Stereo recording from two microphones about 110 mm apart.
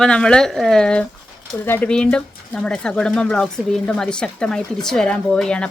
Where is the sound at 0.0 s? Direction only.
10° left (ahead or behind).